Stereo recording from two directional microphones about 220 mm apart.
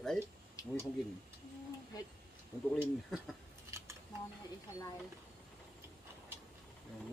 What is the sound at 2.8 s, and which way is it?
Speech, centre (ahead or behind).